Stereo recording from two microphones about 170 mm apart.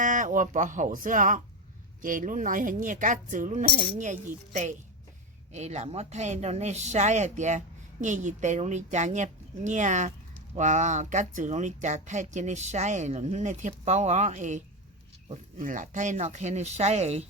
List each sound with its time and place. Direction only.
0.0 s speech: 50° right (ahead or behind)